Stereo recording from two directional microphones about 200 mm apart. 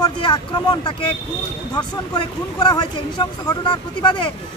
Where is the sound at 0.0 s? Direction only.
20° left (ahead or behind).